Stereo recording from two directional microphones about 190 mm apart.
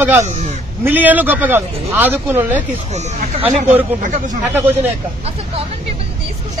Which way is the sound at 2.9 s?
35° right (ahead or behind).